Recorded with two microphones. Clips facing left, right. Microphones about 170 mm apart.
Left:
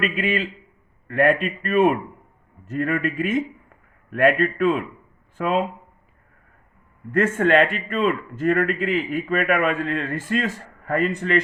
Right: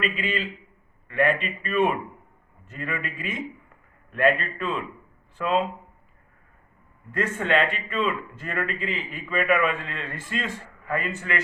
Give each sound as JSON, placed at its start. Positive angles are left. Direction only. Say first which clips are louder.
{"t": 0.0, "sound": "a man's voice", "louder": "left 5 dB", "side_deg": 50}
{"t": 7.1, "sound": "a man's voice", "louder": "left 6 dB", "side_deg": 50}